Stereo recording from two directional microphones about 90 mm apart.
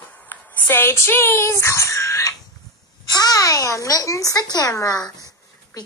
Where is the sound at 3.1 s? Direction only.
45° left (ahead or behind).